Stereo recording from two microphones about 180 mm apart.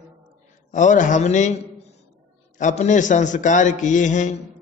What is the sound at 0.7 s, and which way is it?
Speech, 45° left (ahead or behind).